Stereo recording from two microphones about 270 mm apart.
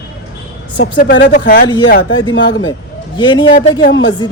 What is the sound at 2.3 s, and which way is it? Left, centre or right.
Speech, left.